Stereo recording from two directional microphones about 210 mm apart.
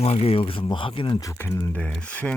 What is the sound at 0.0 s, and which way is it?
Speech, 30° left (ahead or behind).